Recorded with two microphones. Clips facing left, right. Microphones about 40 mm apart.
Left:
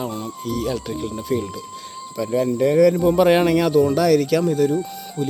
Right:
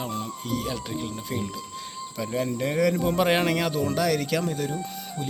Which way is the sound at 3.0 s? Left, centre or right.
Right.